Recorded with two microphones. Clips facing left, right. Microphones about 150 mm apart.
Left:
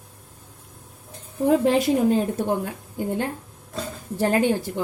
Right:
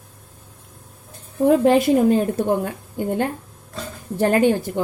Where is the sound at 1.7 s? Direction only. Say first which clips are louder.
Right 4 dB; 55° right (ahead or behind).